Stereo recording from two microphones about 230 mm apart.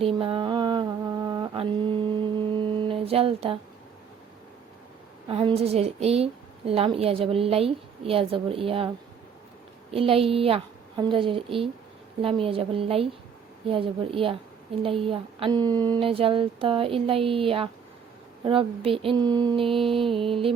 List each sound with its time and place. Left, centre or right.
0.0 s mantra: right
5.3 s a woman's voice: right
9.9 s a woman's voice: right